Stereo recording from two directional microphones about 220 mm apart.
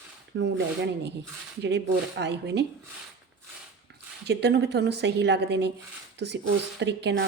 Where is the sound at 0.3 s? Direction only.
50° right (ahead or behind).